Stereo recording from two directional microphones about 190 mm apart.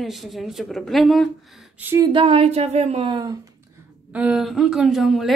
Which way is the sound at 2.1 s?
30° right (ahead or behind).